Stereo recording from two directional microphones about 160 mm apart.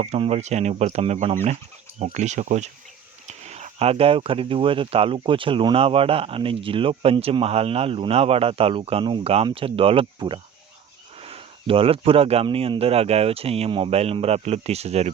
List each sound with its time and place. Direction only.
0.0 s speech: 45° right (ahead or behind)